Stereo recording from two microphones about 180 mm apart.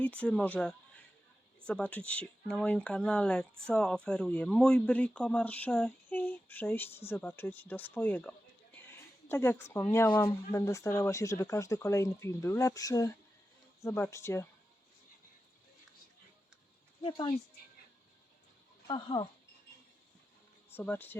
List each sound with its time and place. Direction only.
0.0 s speech: 5° left (ahead or behind)
17.0 s speech: 25° left (ahead or behind)
18.9 s speech: 25° left (ahead or behind)
20.7 s speech: 10° left (ahead or behind)